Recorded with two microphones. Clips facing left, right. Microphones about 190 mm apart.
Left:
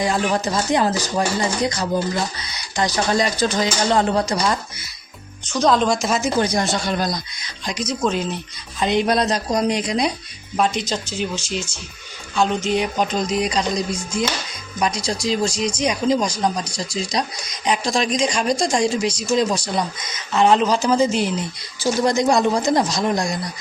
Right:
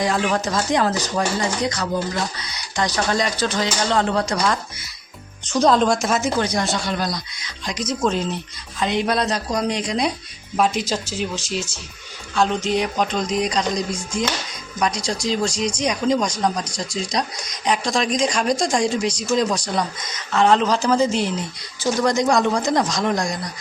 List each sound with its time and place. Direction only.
0.0 s speech: 5° left (ahead or behind)
5.5 s speech: 5° right (ahead or behind)
6.8 s speech: 45° left (ahead or behind)
7.8 s speech: centre (ahead or behind)
9.5 s speech: 15° left (ahead or behind)
20.3 s speech: 15° left (ahead or behind)